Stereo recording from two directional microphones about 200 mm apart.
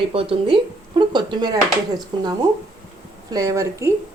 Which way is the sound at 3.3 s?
15° right (ahead or behind).